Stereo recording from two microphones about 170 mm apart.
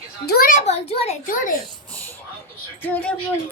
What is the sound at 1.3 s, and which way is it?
Speech, 50° left (ahead or behind).